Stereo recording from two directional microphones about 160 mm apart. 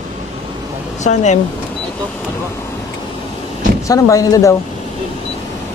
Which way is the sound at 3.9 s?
20° left (ahead or behind).